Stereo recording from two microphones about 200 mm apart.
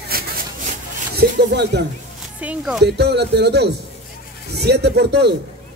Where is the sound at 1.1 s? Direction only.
55° right (ahead or behind).